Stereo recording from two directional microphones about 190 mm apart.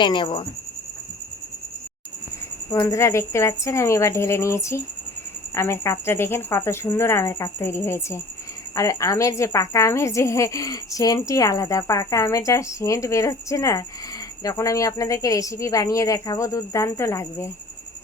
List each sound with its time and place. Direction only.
0.0 s speech: 25° left (ahead or behind)
2.6 s a woman's voice: 20° left (ahead or behind)